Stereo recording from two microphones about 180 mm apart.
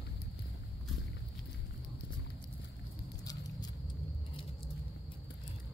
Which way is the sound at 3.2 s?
20° left (ahead or behind).